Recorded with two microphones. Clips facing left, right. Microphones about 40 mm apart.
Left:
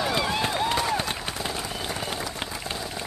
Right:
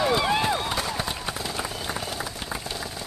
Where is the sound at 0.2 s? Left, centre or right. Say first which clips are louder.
Right 3 dB; centre.